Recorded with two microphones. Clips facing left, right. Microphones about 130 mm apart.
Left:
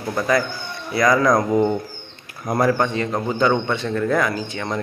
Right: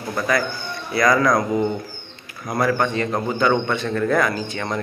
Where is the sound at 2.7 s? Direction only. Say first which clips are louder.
Even; 20° left (ahead or behind).